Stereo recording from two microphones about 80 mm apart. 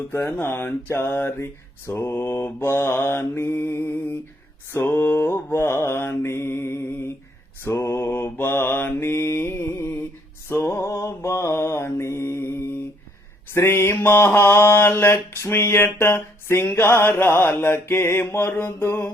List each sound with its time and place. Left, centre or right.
0.1 s mantra: left